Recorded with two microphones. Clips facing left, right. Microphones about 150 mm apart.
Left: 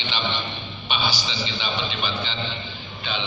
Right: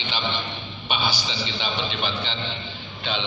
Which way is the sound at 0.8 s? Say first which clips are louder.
Even; 55° right (ahead or behind).